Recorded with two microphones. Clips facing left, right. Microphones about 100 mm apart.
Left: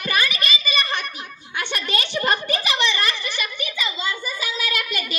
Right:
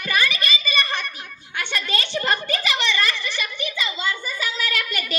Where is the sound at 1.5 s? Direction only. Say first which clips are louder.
Left 1 dB; 15° left (ahead or behind).